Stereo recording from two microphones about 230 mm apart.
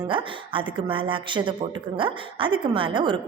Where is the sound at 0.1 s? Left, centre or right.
Right.